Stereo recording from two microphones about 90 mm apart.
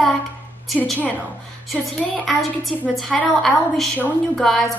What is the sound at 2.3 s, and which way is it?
A woman's voice, centre (ahead or behind).